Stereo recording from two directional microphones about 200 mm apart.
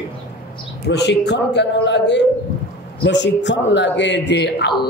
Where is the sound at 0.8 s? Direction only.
60° left (ahead or behind).